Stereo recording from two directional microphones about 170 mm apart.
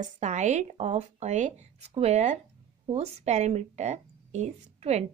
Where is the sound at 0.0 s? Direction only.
45° right (ahead or behind).